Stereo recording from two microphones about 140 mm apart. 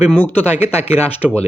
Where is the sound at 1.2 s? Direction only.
10° right (ahead or behind).